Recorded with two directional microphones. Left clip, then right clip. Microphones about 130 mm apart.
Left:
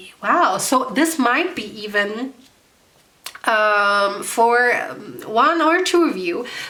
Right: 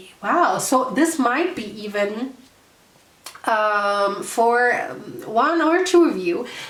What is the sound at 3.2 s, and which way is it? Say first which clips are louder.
A woman's voice: left 3 dB; 25° left (ahead or behind).